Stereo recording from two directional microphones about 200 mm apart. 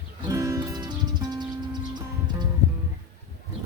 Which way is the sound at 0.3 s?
15° right (ahead or behind).